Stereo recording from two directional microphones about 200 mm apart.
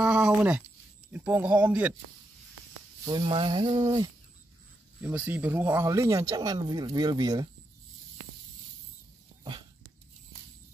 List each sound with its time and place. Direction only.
0.0 s a sound: 5° right (ahead or behind)
1.1 s speech: 10° right (ahead or behind)
3.1 s speech: 25° right (ahead or behind)
5.0 s speech: 10° right (ahead or behind)
9.4 s dog: 20° right (ahead or behind)